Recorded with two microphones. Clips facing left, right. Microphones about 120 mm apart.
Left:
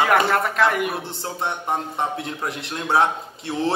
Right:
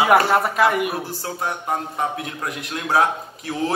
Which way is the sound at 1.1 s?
25° left (ahead or behind).